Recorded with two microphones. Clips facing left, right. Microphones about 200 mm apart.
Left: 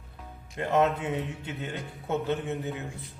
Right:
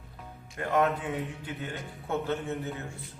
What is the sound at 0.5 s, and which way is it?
A man's voice, 25° left (ahead or behind).